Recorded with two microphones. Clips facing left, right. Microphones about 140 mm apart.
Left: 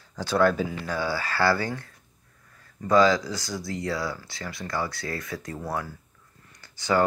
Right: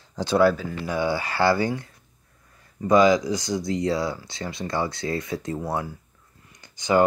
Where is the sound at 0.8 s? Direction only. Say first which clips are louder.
Right 4 dB; 20° right (ahead or behind).